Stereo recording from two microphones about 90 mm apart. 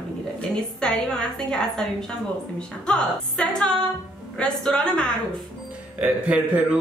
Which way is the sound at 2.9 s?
10° left (ahead or behind).